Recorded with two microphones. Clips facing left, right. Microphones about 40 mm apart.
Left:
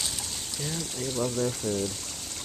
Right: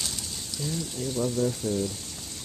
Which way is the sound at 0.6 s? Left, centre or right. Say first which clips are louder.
Right 2 dB; left.